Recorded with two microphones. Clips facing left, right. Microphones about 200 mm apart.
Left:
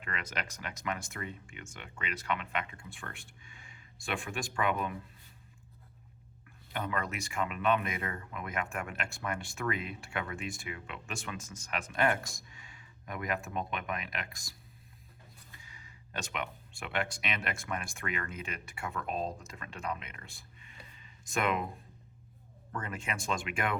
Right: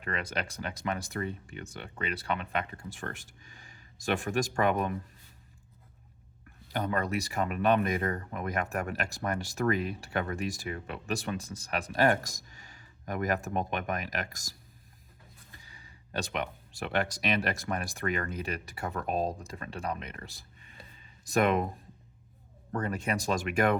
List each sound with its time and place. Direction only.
0.0 s speech: 35° right (ahead or behind)
6.7 s speech: 35° right (ahead or behind)
15.5 s speech: 35° right (ahead or behind)
22.7 s speech: 40° right (ahead or behind)